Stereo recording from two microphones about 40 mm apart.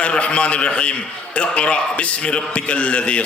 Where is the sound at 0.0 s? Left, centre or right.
Left.